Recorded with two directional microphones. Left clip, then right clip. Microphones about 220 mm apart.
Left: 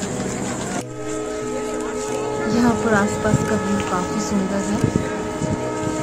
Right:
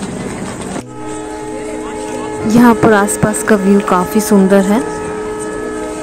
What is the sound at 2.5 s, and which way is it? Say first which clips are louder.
Speech: right 11 dB; 35° right (ahead or behind).